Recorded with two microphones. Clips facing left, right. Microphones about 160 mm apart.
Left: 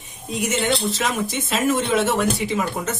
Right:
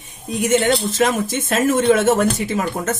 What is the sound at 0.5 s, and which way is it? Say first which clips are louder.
Speech: right 6 dB; 50° right (ahead or behind).